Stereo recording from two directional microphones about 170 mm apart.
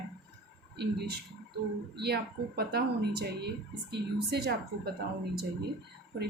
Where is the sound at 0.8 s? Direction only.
75° right (ahead or behind).